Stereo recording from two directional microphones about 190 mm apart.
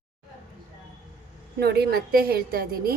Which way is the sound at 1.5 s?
55° right (ahead or behind).